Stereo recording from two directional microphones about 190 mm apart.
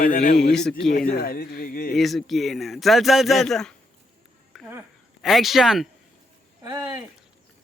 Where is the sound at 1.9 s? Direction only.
Centre (ahead or behind).